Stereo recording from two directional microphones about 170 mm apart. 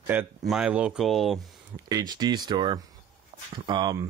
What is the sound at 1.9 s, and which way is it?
Speech, 25° right (ahead or behind).